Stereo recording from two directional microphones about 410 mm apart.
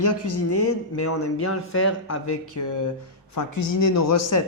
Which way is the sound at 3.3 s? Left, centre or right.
Left.